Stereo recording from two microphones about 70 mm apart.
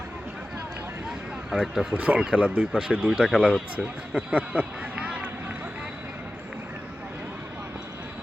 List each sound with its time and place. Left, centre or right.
1.5 s speech: centre
1.9 s speech: centre